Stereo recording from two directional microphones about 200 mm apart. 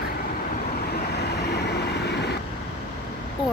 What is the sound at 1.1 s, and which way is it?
Vehicle, 55° left (ahead or behind).